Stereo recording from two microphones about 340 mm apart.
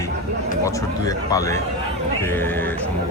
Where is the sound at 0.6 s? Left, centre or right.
Centre.